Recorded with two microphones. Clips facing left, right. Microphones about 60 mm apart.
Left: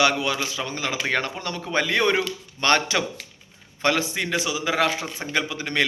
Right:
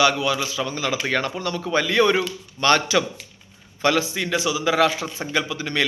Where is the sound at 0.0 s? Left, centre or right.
Left.